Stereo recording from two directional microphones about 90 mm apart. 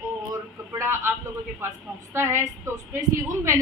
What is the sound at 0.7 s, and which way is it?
A woman's voice, 35° right (ahead or behind).